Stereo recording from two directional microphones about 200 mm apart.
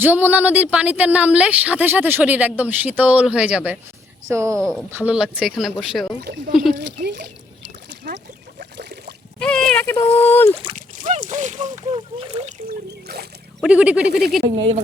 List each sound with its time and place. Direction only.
0.0 s speech: 10° right (ahead or behind)
4.5 s speech: 5° left (ahead or behind)
4.9 s speech: 10° right (ahead or behind)
6.7 s speech: 60° right (ahead or behind)
7.9 s a sound: 60° right (ahead or behind)
9.4 s a sound: 5° left (ahead or behind)
10.2 s speech: 10° left (ahead or behind)
10.5 s speech: 25° right (ahead or behind)
10.8 s speech: 40° right (ahead or behind)
12.6 s a sound: 50° right (ahead or behind)
13.6 s speech: 5° right (ahead or behind)
14.1 s speech: 50° right (ahead or behind)